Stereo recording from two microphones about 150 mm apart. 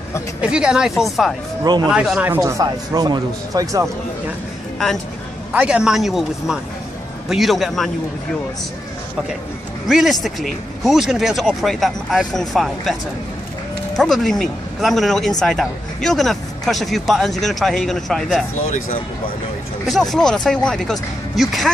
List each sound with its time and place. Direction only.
0.4 s speech: 5° right (ahead or behind)
1.6 s speech: 25° right (ahead or behind)
1.9 s speech: 5° right (ahead or behind)
2.4 s speech: 25° right (ahead or behind)
5.5 s speech: 10° right (ahead or behind)
9.8 s speech: centre (ahead or behind)
13.9 s speech: centre (ahead or behind)
19.9 s speech: centre (ahead or behind)